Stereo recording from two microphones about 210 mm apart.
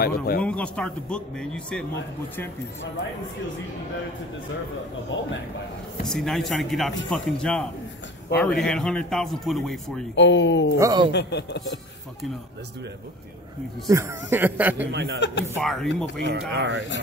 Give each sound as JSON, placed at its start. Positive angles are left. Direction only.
{"t": 0.0, "sound": "speech", "side_deg": 45}
{"t": 0.4, "sound": "speech", "side_deg": 5}
{"t": 5.1, "sound": "speech", "side_deg": 65}
{"t": 6.0, "sound": "speech", "side_deg": 0}
{"t": 10.1, "sound": "speech", "side_deg": 60}
{"t": 10.8, "sound": "speech", "side_deg": -15}
{"t": 11.1, "sound": "speech", "side_deg": 55}
{"t": 13.8, "sound": "speech", "side_deg": -15}
{"t": 14.8, "sound": "speech", "side_deg": -55}
{"t": 15.1, "sound": "speech", "side_deg": 60}
{"t": 15.6, "sound": "speech", "side_deg": 0}
{"t": 16.2, "sound": "speech", "side_deg": -60}